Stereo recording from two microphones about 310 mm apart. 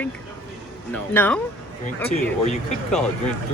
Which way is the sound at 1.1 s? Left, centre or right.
Centre.